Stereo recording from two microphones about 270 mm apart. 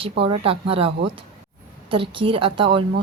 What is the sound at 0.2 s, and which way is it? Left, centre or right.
A woman's voice, right.